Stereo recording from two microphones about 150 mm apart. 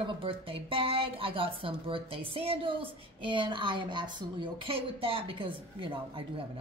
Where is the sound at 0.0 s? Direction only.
35° right (ahead or behind).